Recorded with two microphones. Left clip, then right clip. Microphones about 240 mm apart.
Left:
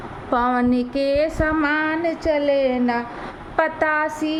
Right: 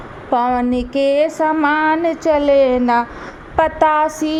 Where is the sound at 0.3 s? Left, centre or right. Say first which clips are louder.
Right 3 dB; centre; by 2.0 s right.